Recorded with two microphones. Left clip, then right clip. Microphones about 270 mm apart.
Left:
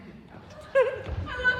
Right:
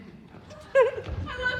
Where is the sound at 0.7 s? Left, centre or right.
Right.